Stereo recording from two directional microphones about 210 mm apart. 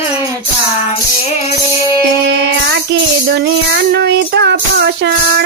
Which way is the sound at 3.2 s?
50° right (ahead or behind).